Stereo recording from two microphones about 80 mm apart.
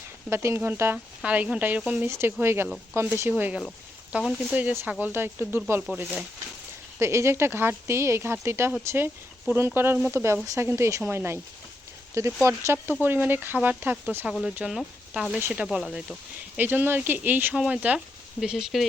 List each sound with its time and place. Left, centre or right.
0.3 s speech: right
1.2 s speech: centre
2.0 s speech: right
4.2 s speech: centre
4.9 s speech: right
7.0 s speech: right
10.4 s speech: right
14.4 s speech: centre
16.6 s speech: right
18.3 s speech: centre